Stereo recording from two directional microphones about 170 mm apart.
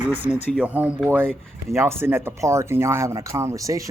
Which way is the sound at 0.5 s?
10° right (ahead or behind).